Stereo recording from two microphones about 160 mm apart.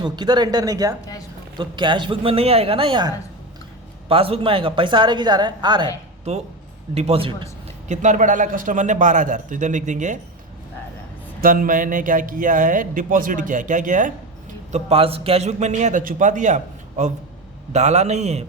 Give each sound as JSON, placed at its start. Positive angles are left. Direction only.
{"t": 0.0, "sound": "speech", "side_deg": -30}
{"t": 4.1, "sound": "speech", "side_deg": -35}
{"t": 6.9, "sound": "speech", "side_deg": -40}
{"t": 7.9, "sound": "a man's voice", "side_deg": -50}
{"t": 11.3, "sound": "speech", "side_deg": -60}
{"t": 14.7, "sound": "a man's voice", "side_deg": -40}